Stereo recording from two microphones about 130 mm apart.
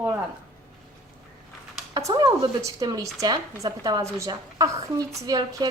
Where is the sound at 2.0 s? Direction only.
25° right (ahead or behind).